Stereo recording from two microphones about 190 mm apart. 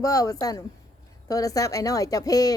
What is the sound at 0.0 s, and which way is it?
Speech, 20° left (ahead or behind).